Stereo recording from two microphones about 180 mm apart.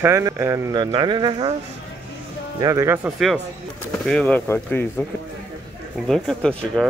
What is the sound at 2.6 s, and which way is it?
Speech, 20° right (ahead or behind).